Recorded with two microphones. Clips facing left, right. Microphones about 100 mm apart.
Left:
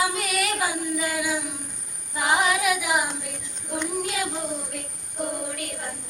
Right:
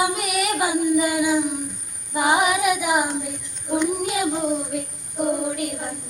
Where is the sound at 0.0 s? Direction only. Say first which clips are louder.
Right 3 dB; 15° right (ahead or behind).